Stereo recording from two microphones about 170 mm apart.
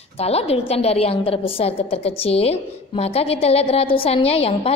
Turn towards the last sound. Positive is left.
turn(degrees=35)  # may be behind; listen again after turning